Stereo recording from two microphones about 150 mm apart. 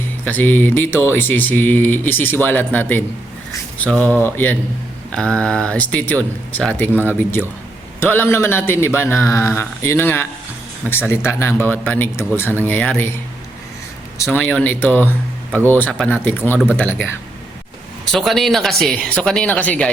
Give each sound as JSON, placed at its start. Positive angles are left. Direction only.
{"t": 0.3, "sound": "a man's voice", "side_deg": 10}
{"t": 14.2, "sound": "a man's voice", "side_deg": 15}
{"t": 18.1, "sound": "speech", "side_deg": 0}